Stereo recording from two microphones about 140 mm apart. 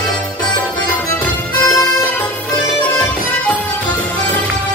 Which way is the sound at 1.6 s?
20° left (ahead or behind).